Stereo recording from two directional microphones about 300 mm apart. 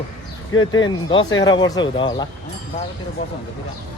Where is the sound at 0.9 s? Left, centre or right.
Centre.